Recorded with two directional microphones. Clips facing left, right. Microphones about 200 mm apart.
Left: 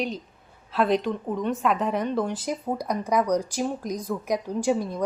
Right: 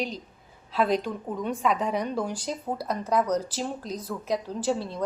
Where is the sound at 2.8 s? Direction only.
15° left (ahead or behind).